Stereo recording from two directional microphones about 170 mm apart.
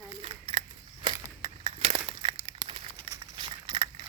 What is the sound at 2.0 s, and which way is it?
Crumpling, 25° right (ahead or behind).